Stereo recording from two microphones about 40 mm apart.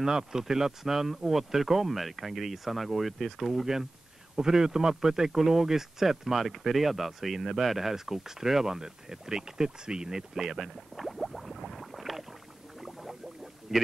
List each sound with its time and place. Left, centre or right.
0.0 s speech: centre
11.0 s boiling: centre
13.7 s a man's voice: centre